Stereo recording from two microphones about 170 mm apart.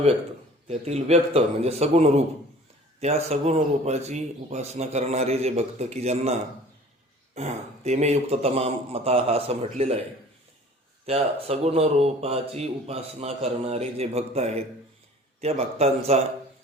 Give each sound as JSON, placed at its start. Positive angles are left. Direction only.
{"t": 0.7, "sound": "speech", "side_deg": -40}
{"t": 7.3, "sound": "speech", "side_deg": -40}
{"t": 11.0, "sound": "speech", "side_deg": -40}